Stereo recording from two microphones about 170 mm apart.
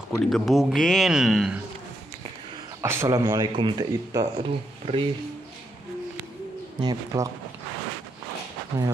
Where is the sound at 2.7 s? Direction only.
15° right (ahead or behind); by 5.1 s 35° right (ahead or behind).